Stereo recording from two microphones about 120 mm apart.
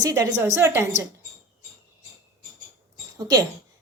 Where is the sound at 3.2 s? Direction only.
30° right (ahead or behind).